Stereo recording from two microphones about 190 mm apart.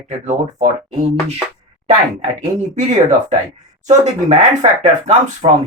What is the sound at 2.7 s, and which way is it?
Speech, 40° right (ahead or behind).